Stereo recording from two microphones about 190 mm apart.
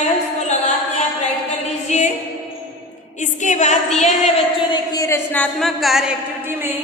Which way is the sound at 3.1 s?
40° left (ahead or behind).